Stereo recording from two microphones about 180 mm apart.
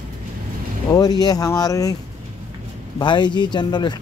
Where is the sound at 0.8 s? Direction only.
20° left (ahead or behind).